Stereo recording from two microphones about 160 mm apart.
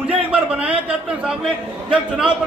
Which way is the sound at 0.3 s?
10° right (ahead or behind).